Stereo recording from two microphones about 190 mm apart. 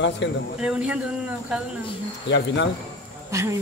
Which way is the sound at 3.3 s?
15° right (ahead or behind).